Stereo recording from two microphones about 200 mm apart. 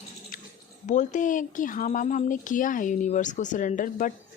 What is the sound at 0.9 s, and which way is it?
A woman's voice, 40° left (ahead or behind).